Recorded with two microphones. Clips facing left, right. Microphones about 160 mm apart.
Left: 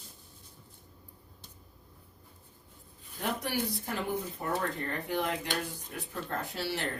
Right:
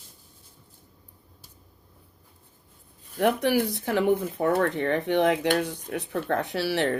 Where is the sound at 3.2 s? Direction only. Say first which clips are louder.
Right 11 dB; 65° right (ahead or behind).